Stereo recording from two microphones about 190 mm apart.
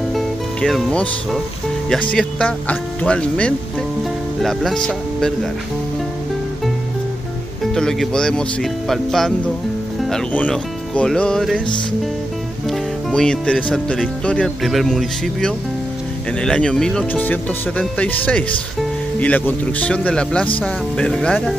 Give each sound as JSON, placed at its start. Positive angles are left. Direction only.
{"t": 0.1, "sound": "music", "side_deg": 0}
{"t": 2.1, "sound": "speech", "side_deg": 5}
{"t": 7.7, "sound": "speech", "side_deg": 5}
{"t": 12.6, "sound": "speech", "side_deg": 5}